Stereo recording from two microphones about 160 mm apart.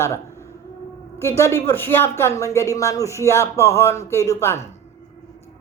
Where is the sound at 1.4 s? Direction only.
15° left (ahead or behind).